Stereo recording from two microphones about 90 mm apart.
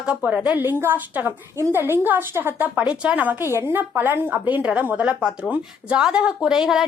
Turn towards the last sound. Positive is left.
turn(degrees=-5)  # may be behind; listen again after turning